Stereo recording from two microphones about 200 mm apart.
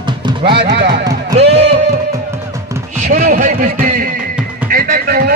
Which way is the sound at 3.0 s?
40° right (ahead or behind).